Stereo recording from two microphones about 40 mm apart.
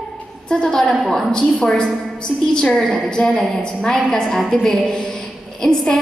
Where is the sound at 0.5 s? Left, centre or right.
Centre.